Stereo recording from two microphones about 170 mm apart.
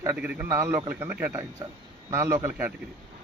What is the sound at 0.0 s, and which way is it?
A man's voice, 15° right (ahead or behind).